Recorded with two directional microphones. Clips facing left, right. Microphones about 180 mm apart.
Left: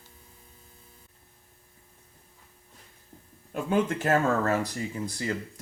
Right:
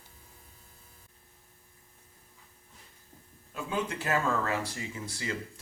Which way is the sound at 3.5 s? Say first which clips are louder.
Left 7 dB; 55° left (ahead or behind).